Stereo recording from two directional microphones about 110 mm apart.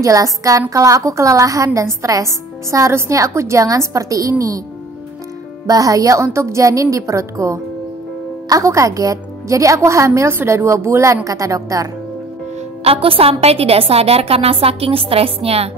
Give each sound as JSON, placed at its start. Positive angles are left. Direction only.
{"t": 0.0, "sound": "a woman's voice", "side_deg": -30}
{"t": 5.7, "sound": "a woman's voice", "side_deg": -30}
{"t": 12.8, "sound": "a woman's voice", "side_deg": -60}